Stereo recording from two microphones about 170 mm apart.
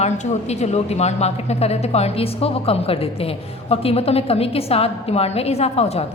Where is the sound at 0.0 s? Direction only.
40° left (ahead or behind).